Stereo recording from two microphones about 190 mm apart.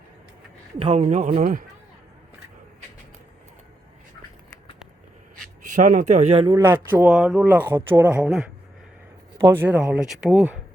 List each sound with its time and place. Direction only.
0.8 s speech: 30° right (ahead or behind); by 1.6 s 45° right (ahead or behind)
5.6 s speech: 40° right (ahead or behind)
6.6 s speech: 10° right (ahead or behind)